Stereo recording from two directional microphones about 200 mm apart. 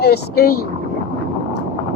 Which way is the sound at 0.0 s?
50° left (ahead or behind).